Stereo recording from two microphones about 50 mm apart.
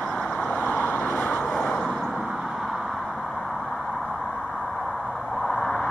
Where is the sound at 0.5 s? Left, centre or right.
Left.